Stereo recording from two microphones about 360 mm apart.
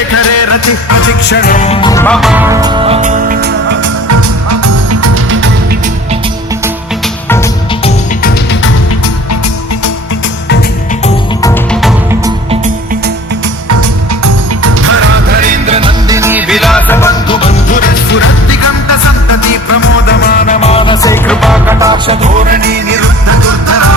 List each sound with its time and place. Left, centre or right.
0.2 s music: left
1.3 s music: left; by 3.8 s right
4.1 s music: right
7.3 s music: centre
11.0 s music: centre
14.6 s music: right; by 19.5 s left
20.1 s music: left; by 23.0 s right
23.3 s music: right